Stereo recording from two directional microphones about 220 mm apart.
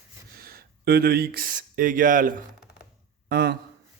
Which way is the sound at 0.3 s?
45° right (ahead or behind).